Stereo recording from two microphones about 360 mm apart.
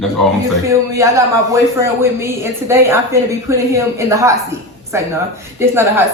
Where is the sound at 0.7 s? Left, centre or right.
Centre.